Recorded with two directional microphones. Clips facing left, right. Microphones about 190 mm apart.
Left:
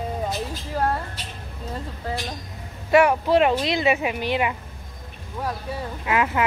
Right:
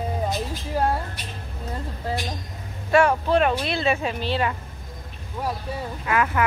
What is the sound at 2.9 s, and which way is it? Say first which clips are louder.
A woman's voice: left 2 dB; 20° left (ahead or behind).